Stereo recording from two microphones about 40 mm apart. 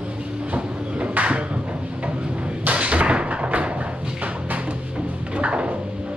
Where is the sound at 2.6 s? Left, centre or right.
Right.